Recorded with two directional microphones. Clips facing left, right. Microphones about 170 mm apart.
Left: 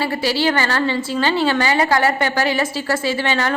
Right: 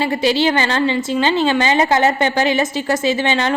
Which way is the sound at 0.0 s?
20° right (ahead or behind).